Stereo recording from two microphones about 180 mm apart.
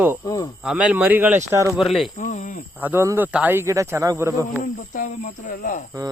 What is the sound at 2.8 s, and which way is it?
Speech, 10° right (ahead or behind).